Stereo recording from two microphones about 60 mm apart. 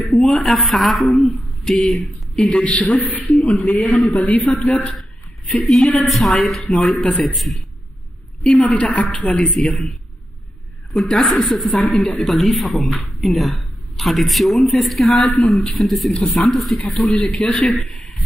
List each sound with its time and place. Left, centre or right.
0.0 s speech: centre
2.0 s a man's voice: left
3.7 s a man's voice: centre
8.5 s a man's voice: left
10.9 s speech: centre
17.3 s a man's voice: centre